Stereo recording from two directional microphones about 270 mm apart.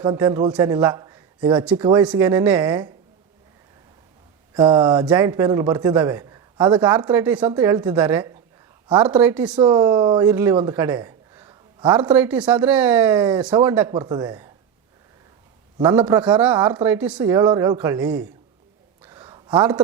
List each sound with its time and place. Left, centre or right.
0.0 s a man's voice: centre
4.5 s speech: centre
9.6 s speech: centre
15.8 s speech: centre
19.0 s a sound: centre